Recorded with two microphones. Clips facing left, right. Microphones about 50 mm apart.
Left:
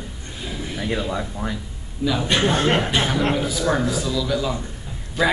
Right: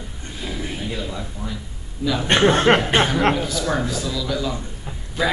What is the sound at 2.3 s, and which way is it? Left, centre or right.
Speech, right.